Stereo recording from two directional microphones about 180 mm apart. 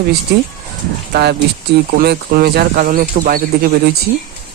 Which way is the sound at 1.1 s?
60° right (ahead or behind).